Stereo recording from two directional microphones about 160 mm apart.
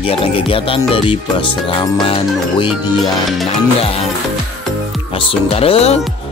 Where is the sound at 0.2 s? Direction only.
35° left (ahead or behind).